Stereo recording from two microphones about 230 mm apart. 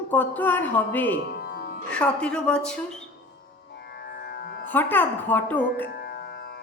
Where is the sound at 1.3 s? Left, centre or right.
Left.